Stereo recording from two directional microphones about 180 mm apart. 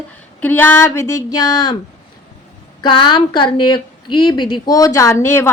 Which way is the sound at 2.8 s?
25° left (ahead or behind).